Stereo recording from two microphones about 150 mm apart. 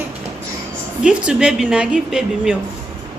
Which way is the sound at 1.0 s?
5° right (ahead or behind).